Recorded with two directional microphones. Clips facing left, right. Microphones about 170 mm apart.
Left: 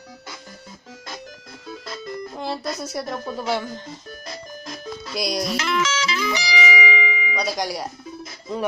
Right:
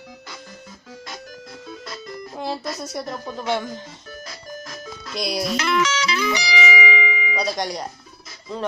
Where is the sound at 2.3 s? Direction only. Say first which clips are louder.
Right 2 dB; centre (ahead or behind).